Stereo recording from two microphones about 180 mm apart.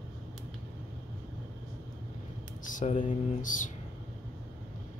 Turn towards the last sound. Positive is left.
turn(degrees=45)  # may be behind; listen again after turning